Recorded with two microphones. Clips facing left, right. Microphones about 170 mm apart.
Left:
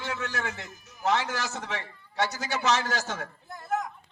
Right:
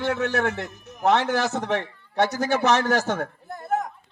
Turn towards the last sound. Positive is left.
turn(degrees=-45)  # may be behind; listen again after turning